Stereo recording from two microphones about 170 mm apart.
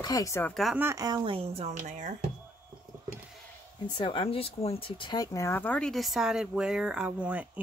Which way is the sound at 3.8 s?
30° left (ahead or behind).